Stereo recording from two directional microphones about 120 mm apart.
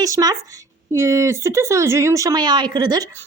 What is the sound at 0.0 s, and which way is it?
Speech, 30° right (ahead or behind).